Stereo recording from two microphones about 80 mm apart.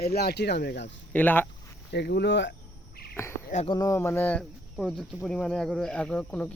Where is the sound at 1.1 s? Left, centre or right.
Left.